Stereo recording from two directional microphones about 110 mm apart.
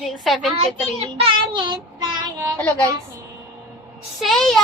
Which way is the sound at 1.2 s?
45° right (ahead or behind).